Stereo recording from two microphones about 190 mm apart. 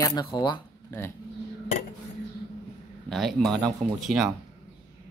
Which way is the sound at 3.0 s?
Centre (ahead or behind).